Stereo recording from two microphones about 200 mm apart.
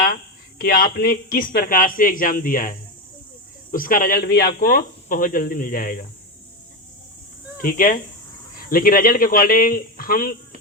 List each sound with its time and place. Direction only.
0.6 s speech: 45° left (ahead or behind)
7.6 s speech: 45° left (ahead or behind)